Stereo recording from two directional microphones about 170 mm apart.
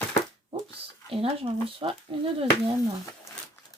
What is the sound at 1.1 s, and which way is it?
Speech, 30° right (ahead or behind).